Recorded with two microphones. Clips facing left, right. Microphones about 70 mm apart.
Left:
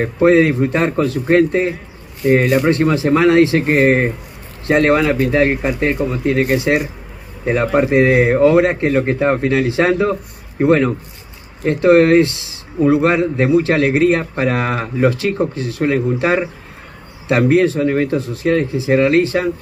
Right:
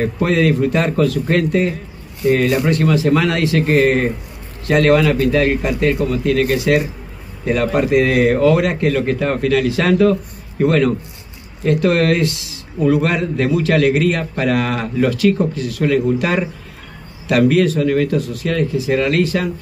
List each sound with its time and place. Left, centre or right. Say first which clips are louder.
0.0 s speech: left 4 dB; left